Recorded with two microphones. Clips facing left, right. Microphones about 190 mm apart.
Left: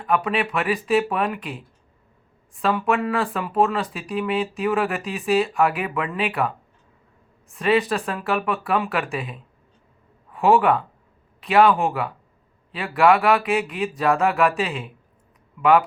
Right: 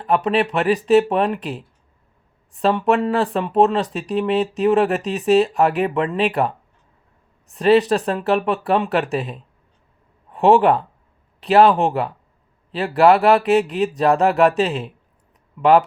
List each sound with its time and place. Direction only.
0.0 s speech: 35° right (ahead or behind)